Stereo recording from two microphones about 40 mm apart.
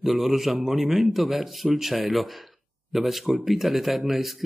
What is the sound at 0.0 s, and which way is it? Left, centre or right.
Speech, centre.